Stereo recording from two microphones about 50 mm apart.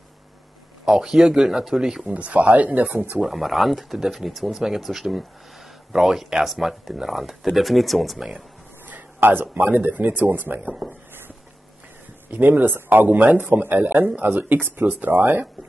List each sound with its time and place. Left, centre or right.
0.8 s speech: centre
2.0 s speech: right
3.2 s speech: centre
8.8 s a sound: right
9.6 s speech: right
12.3 s speech: right